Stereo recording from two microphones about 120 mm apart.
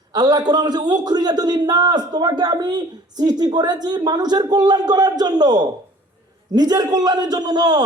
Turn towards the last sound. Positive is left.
turn(degrees=-35)  # may be behind; listen again after turning